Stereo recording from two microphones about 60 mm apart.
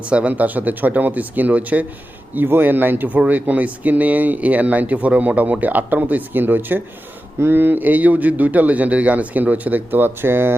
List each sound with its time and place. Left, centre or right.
0.0 s speech: centre; by 10.5 s right